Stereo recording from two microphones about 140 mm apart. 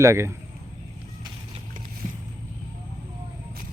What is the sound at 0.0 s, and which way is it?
Speech, 20° right (ahead or behind).